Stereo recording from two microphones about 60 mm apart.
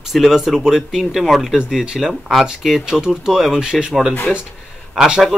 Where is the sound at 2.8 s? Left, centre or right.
Centre.